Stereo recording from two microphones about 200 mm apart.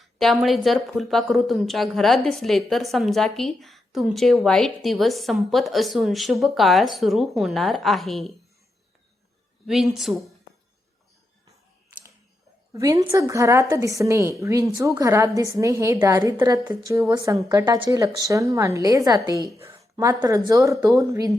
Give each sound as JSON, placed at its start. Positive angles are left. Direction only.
{"t": 0.0, "sound": "speech", "side_deg": 0}
{"t": 9.6, "sound": "speech", "side_deg": 0}
{"t": 12.7, "sound": "speech", "side_deg": -15}